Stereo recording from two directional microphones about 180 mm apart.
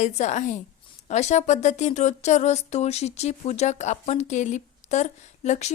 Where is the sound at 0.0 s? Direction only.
40° left (ahead or behind).